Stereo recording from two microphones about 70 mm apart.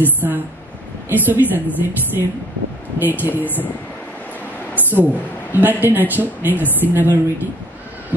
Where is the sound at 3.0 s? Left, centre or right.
Right.